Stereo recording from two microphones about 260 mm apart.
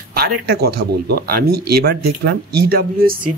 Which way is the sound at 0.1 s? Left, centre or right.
Right.